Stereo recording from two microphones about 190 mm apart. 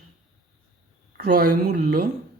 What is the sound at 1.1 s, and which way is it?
Speech, 55° right (ahead or behind).